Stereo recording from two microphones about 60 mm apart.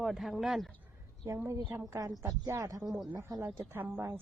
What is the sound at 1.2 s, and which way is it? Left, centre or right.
Speech, right.